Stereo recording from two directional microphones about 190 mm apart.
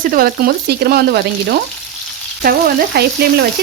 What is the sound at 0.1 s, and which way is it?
Frying, 50° right (ahead or behind).